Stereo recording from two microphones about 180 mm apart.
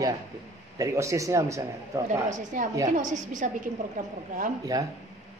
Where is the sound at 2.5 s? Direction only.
45° right (ahead or behind).